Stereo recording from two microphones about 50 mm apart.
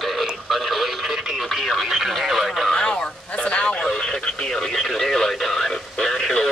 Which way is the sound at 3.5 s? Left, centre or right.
Left.